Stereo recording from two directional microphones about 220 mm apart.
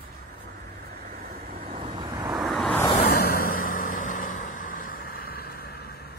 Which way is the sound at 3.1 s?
45° left (ahead or behind).